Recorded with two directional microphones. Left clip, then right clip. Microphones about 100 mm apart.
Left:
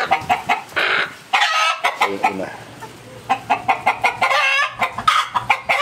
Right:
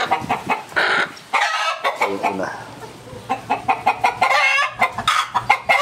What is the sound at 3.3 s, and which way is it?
Chicken, 15° left (ahead or behind).